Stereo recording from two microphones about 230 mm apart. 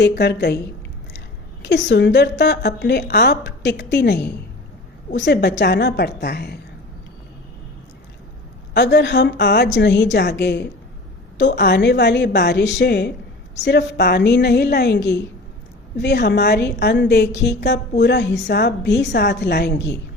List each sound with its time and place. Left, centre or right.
0.0 s a woman's voice: left
1.6 s a woman's voice: left
8.7 s a woman's voice: left